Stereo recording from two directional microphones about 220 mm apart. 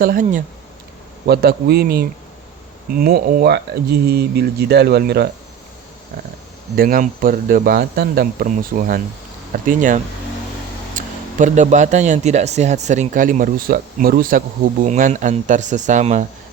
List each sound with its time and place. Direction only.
0.0 s speech: 40° right (ahead or behind)
6.7 s speech: 40° right (ahead or behind)